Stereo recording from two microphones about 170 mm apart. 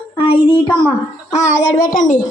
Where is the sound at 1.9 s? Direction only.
50° left (ahead or behind).